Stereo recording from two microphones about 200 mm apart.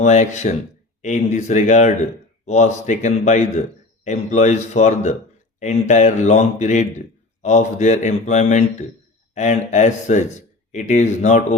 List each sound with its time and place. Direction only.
0.0 s a man's voice: 35° left (ahead or behind)